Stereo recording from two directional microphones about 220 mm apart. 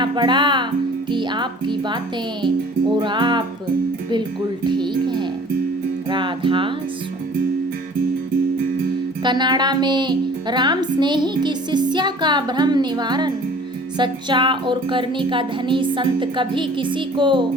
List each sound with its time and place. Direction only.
0.0 s speech: 20° right (ahead or behind)
3.0 s speech: 20° right (ahead or behind)
4.6 s speech: 20° right (ahead or behind)
9.2 s speech: 20° right (ahead or behind)